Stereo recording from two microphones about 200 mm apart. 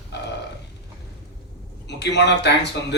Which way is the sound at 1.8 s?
60° left (ahead or behind).